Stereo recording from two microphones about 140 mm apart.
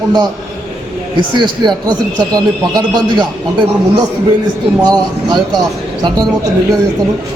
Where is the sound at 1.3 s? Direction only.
30° right (ahead or behind).